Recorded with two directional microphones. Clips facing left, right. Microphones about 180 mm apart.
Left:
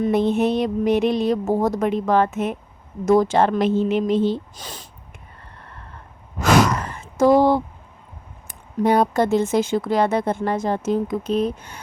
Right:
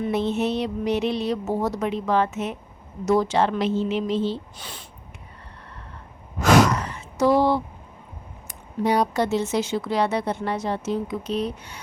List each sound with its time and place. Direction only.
0.0 s speech: 50° left (ahead or behind)
6.7 s a sound: 50° left (ahead or behind)
8.4 s speech: 50° left (ahead or behind)